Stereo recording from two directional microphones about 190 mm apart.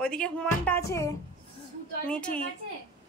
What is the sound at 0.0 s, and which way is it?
Speech, 5° left (ahead or behind).